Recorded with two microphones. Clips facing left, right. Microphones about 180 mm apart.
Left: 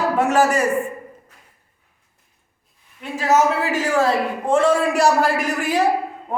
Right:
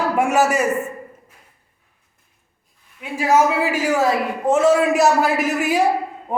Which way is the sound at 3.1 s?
10° right (ahead or behind).